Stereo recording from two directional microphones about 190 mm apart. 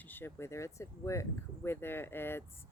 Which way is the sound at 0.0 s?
10° left (ahead or behind).